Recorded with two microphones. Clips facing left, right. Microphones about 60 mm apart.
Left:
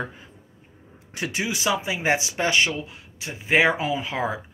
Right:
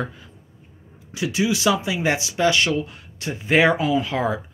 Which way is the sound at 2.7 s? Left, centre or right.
Centre.